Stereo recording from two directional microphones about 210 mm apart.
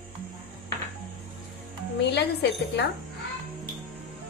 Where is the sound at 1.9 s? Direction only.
55° left (ahead or behind).